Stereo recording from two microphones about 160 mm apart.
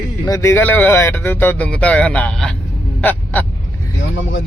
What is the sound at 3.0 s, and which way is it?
Honk, 10° left (ahead or behind).